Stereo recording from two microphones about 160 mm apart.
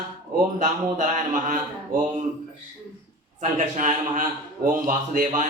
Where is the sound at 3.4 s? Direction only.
50° right (ahead or behind).